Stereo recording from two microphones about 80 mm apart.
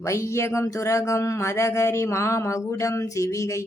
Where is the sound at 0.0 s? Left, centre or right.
Left.